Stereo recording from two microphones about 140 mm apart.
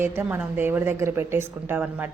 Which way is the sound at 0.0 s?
15° right (ahead or behind).